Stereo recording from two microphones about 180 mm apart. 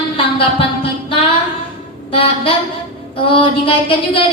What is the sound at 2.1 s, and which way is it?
Music, 30° left (ahead or behind).